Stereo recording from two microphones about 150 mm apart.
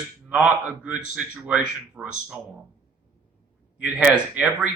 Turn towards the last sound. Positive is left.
turn(degrees=-10)  # may be behind; listen again after turning